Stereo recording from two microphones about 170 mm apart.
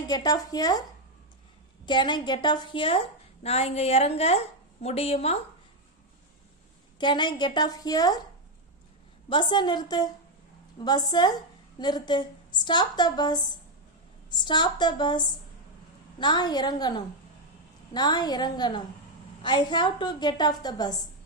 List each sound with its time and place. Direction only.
0.1 s a woman's voice: 20° left (ahead or behind)
1.8 s a woman's voice: 25° left (ahead or behind)
7.0 s a woman's voice: 25° left (ahead or behind)
9.3 s a woman's voice: 25° left (ahead or behind)